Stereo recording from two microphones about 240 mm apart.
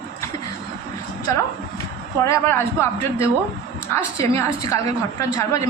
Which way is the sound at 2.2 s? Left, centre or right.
Centre.